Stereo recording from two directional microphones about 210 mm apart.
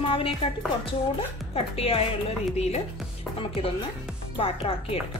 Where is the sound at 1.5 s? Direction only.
30° left (ahead or behind).